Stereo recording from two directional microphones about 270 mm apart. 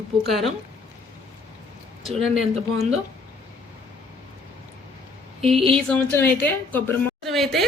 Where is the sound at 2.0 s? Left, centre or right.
Centre.